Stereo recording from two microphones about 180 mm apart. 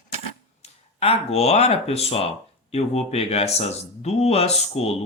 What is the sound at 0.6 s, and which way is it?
Speech, 35° left (ahead or behind).